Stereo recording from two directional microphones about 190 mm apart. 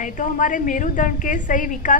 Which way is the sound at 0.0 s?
45° left (ahead or behind).